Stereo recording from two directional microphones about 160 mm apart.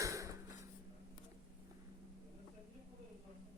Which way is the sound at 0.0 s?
20° right (ahead or behind).